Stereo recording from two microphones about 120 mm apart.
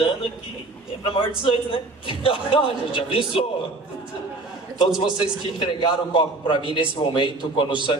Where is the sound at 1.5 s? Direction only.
45° left (ahead or behind).